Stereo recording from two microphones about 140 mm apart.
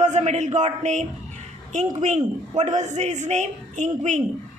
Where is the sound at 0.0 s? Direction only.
55° right (ahead or behind).